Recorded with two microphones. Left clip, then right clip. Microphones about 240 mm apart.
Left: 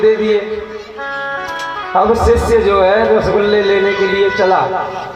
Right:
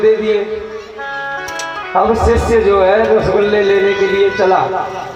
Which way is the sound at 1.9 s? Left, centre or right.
Left.